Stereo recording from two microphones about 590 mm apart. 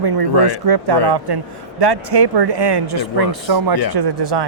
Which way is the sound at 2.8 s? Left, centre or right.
Right.